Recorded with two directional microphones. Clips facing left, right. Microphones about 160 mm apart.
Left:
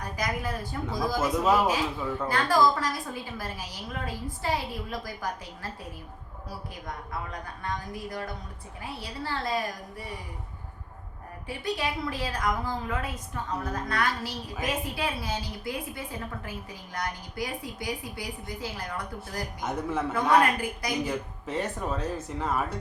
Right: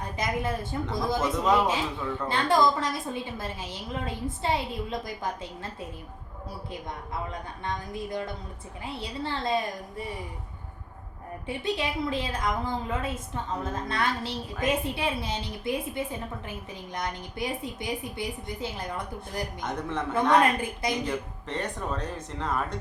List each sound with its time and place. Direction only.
0.0 s a woman's voice: 25° right (ahead or behind)
1.2 s speech: 5° left (ahead or behind)
2.2 s a woman's voice: 25° right (ahead or behind)
6.8 s a woman's voice: 25° right (ahead or behind)
11.4 s a woman's voice: 25° right (ahead or behind)
19.6 s speech: 5° left (ahead or behind)
20.4 s a woman's voice: 25° right (ahead or behind)
21.0 s speech: 5° left (ahead or behind)